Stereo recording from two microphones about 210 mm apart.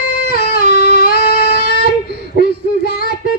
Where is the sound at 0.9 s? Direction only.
45° left (ahead or behind).